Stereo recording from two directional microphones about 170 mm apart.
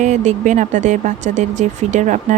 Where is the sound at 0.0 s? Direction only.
45° right (ahead or behind).